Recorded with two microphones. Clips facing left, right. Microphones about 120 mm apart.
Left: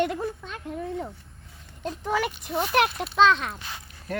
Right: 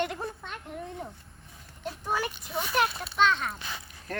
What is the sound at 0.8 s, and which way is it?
A child's voice, 90° left.